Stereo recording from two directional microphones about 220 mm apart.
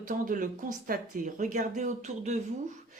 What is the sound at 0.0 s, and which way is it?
Speech, 40° right (ahead or behind).